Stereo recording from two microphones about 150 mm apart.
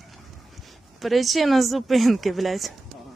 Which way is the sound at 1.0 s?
Centre (ahead or behind).